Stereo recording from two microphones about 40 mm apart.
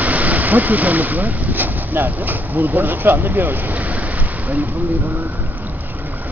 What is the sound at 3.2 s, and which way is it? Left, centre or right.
Speech, right.